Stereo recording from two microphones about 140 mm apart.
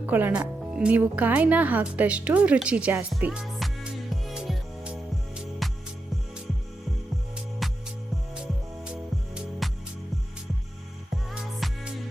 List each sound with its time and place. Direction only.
0.0 s a woman's voice: 15° right (ahead or behind)
4.1 s music: centre (ahead or behind)
7.6 s music: centre (ahead or behind)
11.1 s music: centre (ahead or behind)